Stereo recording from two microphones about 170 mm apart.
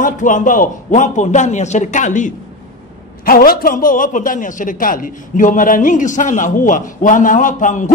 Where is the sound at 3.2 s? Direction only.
60° left (ahead or behind).